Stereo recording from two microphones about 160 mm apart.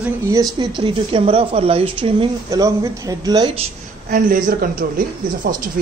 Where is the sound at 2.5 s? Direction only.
20° right (ahead or behind).